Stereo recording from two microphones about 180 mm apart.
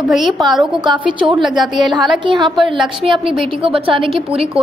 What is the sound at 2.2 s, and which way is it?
Speech, 25° right (ahead or behind).